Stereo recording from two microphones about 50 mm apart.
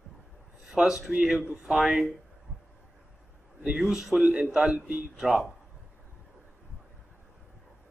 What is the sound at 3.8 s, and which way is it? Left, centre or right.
Speech, centre.